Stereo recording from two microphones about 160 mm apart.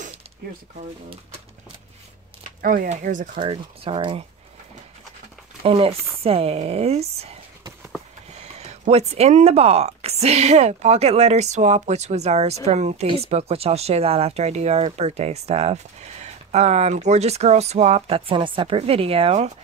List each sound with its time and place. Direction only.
2.6 s speech: 65° right (ahead or behind)
3.4 s speech: 35° right (ahead or behind)
5.6 s speech: 35° right (ahead or behind)